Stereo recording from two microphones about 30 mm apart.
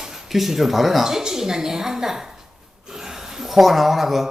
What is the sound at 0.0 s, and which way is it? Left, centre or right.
Speech, centre.